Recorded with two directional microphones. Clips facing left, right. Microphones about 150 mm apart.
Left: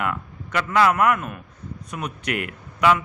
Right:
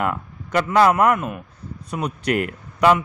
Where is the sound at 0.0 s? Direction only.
35° right (ahead or behind).